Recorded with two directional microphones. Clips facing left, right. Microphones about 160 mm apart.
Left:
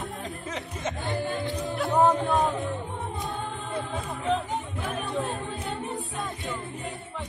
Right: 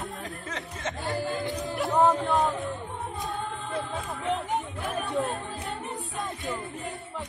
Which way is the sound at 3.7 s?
Centre (ahead or behind).